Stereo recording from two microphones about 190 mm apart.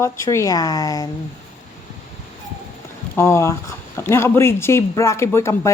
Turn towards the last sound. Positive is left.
turn(degrees=15)  # may be behind; listen again after turning